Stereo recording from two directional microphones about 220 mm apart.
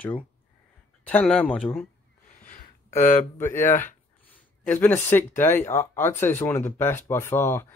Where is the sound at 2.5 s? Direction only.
35° left (ahead or behind).